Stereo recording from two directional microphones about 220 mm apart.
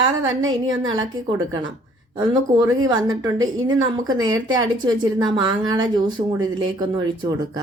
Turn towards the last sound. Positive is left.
turn(degrees=-15)  # may be behind; listen again after turning